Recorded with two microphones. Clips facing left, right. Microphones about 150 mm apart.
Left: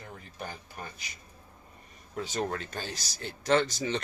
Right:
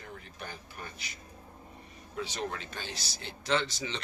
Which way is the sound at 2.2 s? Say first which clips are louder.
Left 4 dB; 45° left (ahead or behind).